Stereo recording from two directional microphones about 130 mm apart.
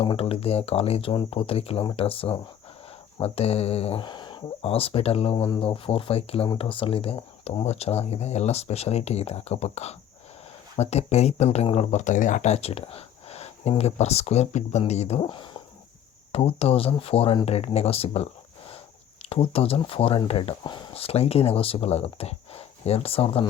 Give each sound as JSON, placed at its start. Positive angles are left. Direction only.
{"t": 0.0, "sound": "speech", "side_deg": 45}
{"t": 4.0, "sound": "speech", "side_deg": 35}
{"t": 15.2, "sound": "speech", "side_deg": 40}
{"t": 16.3, "sound": "speech", "side_deg": 50}
{"t": 19.3, "sound": "speech", "side_deg": 45}